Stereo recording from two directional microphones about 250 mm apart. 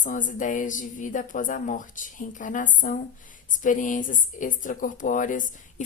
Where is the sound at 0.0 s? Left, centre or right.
Left.